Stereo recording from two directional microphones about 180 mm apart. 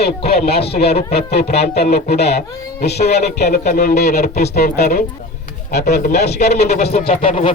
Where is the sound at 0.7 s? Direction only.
60° left (ahead or behind).